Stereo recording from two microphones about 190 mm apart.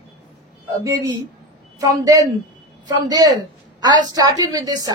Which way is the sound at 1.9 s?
20° right (ahead or behind).